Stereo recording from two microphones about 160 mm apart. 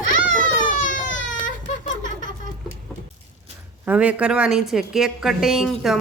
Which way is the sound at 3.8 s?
10° right (ahead or behind).